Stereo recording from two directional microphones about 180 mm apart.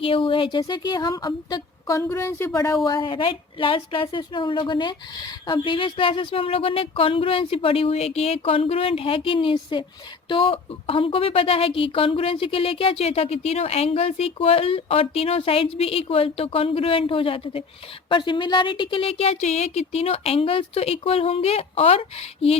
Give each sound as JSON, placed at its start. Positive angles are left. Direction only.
{"t": 0.0, "sound": "a woman's voice", "side_deg": 30}